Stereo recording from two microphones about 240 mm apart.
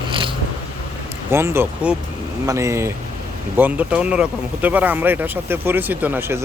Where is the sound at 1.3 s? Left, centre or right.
Centre.